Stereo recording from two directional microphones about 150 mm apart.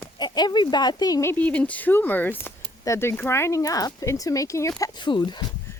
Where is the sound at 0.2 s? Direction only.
30° left (ahead or behind).